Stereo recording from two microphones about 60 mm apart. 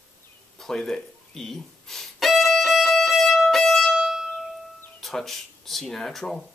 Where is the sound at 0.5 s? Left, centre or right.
Centre.